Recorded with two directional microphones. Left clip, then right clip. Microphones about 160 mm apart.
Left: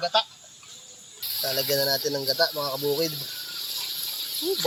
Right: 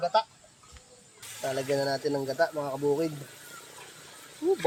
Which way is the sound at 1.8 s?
30° right (ahead or behind).